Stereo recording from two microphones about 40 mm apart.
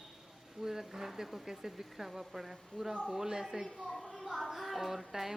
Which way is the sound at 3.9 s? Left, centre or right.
Left.